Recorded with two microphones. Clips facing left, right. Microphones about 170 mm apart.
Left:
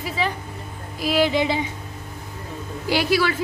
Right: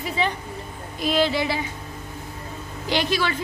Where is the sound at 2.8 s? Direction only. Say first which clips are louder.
Left 3 dB; 10° left (ahead or behind).